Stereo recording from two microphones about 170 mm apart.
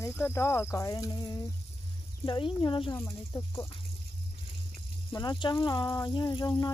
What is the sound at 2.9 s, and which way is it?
Speech, 10° left (ahead or behind).